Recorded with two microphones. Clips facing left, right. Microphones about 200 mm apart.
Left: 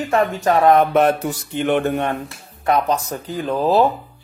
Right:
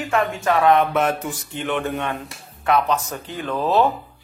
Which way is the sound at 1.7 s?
60° left (ahead or behind).